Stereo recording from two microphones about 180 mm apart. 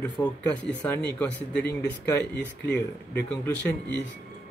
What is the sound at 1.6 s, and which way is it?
Speech, 70° left (ahead or behind).